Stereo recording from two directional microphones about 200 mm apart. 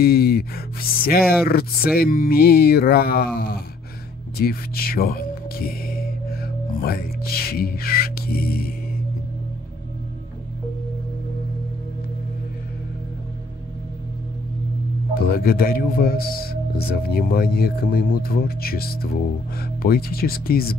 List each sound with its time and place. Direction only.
0.0 s speech: 50° left (ahead or behind)
15.1 s speech: 50° left (ahead or behind)